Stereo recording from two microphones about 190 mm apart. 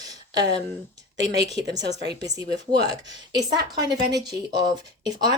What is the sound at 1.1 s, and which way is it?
Speech, 60° right (ahead or behind).